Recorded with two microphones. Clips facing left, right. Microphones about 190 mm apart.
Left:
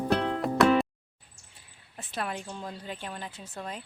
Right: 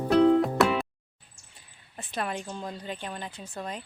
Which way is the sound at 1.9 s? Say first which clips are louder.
Right 2 dB; 5° left (ahead or behind).